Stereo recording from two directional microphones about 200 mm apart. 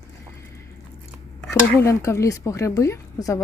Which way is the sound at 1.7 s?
15° left (ahead or behind).